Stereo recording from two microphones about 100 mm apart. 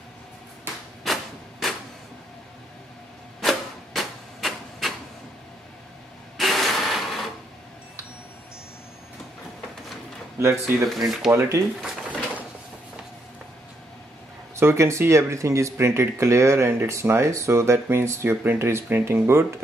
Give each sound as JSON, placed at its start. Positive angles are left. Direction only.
{"t": 1.0, "sound": "a sound", "side_deg": 0}
{"t": 3.3, "sound": "printer", "side_deg": 0}
{"t": 6.3, "sound": "printer", "side_deg": 0}
{"t": 10.4, "sound": "speech", "side_deg": -30}
{"t": 11.1, "sound": "speech", "side_deg": 0}
{"t": 11.3, "sound": "speech", "side_deg": -30}
{"t": 11.8, "sound": "drawer open or close", "side_deg": -15}
{"t": 14.5, "sound": "speech", "side_deg": -25}